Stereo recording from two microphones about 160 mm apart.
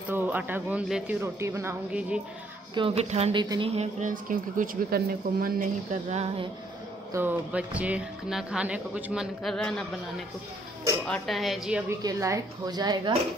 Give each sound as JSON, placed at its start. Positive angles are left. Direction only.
{"t": 0.1, "sound": "speech", "side_deg": -10}
{"t": 1.2, "sound": "speech", "side_deg": -15}
{"t": 2.7, "sound": "speech", "side_deg": -35}
{"t": 3.3, "sound": "speech", "side_deg": -30}
{"t": 3.7, "sound": "speech", "side_deg": -40}
{"t": 4.1, "sound": "speech", "side_deg": -60}
{"t": 7.1, "sound": "speech", "side_deg": -15}
{"t": 11.1, "sound": "speech", "side_deg": 0}
{"t": 12.0, "sound": "speech", "side_deg": -20}